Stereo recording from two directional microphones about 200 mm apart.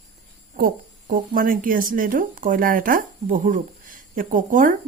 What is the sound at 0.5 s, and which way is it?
Speech, 45° right (ahead or behind).